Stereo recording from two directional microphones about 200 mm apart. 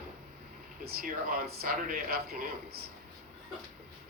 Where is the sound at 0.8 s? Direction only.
50° right (ahead or behind).